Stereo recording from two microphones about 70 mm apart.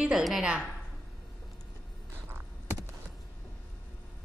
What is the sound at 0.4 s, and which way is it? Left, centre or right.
Speech, centre.